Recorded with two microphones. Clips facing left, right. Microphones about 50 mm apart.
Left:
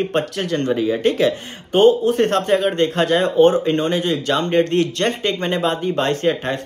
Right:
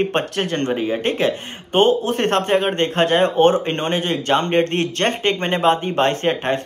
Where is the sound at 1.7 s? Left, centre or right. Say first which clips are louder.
Left 3 dB; right.